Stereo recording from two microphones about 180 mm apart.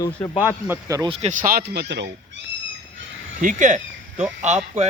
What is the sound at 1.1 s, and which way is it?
Speech, 35° right (ahead or behind).